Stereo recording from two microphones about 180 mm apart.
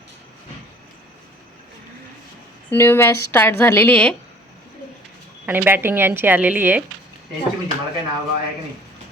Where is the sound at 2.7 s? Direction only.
15° left (ahead or behind).